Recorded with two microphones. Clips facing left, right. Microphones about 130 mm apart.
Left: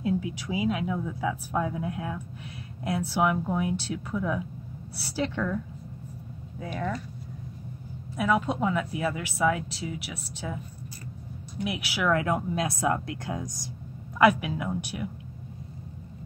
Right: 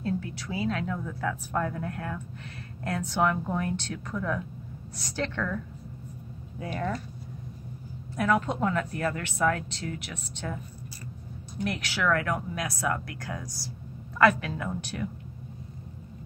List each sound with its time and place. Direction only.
0.0 s a woman's voice: 15° left (ahead or behind)
6.6 s speech: centre (ahead or behind)
8.2 s a woman's voice: 5° left (ahead or behind)
11.6 s a woman's voice: 10° left (ahead or behind)